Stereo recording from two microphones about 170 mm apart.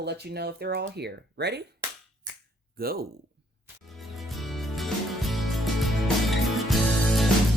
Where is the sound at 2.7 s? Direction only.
60° right (ahead or behind).